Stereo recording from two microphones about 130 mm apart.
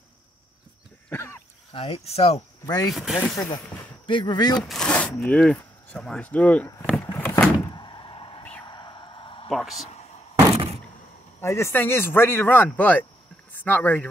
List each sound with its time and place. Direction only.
1.1 s throat clearing: 20° left (ahead or behind)
1.7 s speech: 50° left (ahead or behind)
2.6 s speech: 30° left (ahead or behind)
2.9 s speech: centre (ahead or behind)
3.3 s speech: 35° left (ahead or behind)
4.6 s a sound: 5° left (ahead or behind)
5.2 s speech: 5° left (ahead or behind)
7.2 s a sound: 15° left (ahead or behind)
7.7 s door: 35° left (ahead or behind)
8.6 s a sound: 35° left (ahead or behind)
9.5 s a sound: centre (ahead or behind)
10.5 s door: 50° right (ahead or behind)
11.4 s speech: 20° left (ahead or behind)